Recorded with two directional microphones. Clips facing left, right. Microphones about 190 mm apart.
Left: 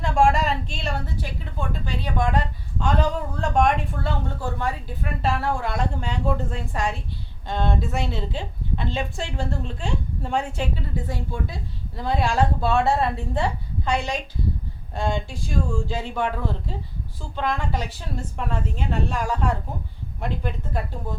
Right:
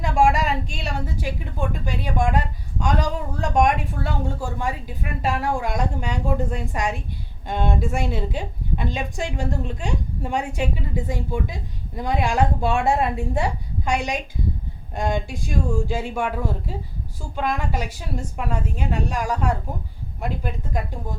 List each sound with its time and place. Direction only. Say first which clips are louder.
0.0 s a woman's voice: right 1 dB; 10° right (ahead or behind)